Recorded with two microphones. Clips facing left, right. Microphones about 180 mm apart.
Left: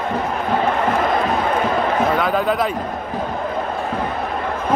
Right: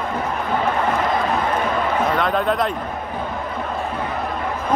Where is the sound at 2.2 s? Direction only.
5° left (ahead or behind).